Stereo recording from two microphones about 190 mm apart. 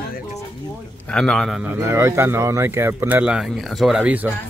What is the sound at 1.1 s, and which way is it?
Speech, 5° left (ahead or behind).